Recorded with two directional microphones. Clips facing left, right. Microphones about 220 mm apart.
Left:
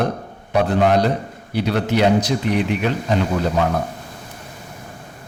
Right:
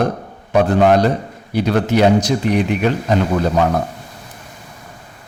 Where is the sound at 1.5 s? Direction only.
45° right (ahead or behind).